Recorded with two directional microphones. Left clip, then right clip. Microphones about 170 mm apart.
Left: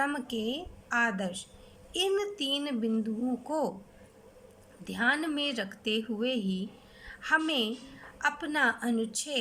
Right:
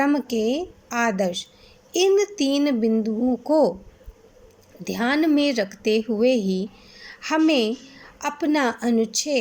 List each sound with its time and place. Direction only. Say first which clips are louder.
0.0 s speech: right 10 dB; 25° right (ahead or behind)
4.8 s speech: right 6 dB; 30° right (ahead or behind)